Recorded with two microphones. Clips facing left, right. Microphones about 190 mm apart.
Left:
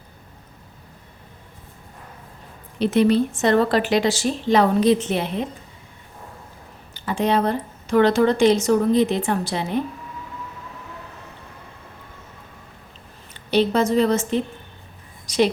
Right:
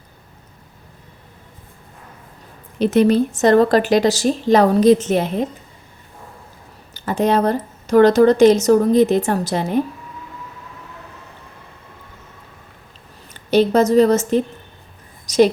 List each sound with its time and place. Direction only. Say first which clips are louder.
2.7 s speech: right 3 dB; 45° right (ahead or behind)
6.9 s speech: right 3 dB; 45° right (ahead or behind)
13.5 s speech: right 5 dB; 45° right (ahead or behind)
15.3 s a sound: right 6 dB; 45° right (ahead or behind)